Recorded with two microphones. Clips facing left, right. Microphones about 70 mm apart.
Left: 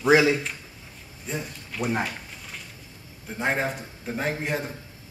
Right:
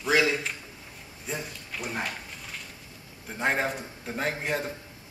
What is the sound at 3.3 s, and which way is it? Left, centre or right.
A man's voice, centre.